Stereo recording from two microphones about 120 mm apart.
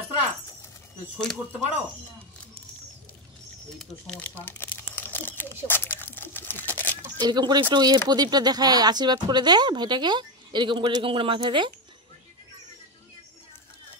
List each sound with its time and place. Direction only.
1.1 s speech: 5° left (ahead or behind)
3.7 s speech: 5° left (ahead or behind)
4.5 s crumpling: 15° left (ahead or behind)
5.7 s a sound: 20° left (ahead or behind)
7.2 s speech: 35° right (ahead or behind)